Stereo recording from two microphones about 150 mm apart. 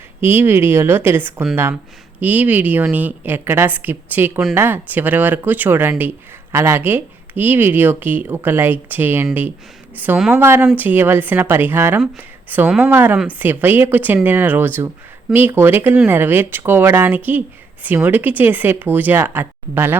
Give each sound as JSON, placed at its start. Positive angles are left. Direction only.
{"t": 0.2, "sound": "speech", "side_deg": -15}